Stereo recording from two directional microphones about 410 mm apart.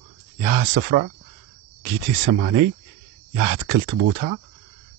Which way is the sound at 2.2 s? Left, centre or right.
Right.